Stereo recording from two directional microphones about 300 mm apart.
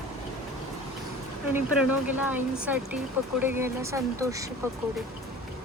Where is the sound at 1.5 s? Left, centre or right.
Centre.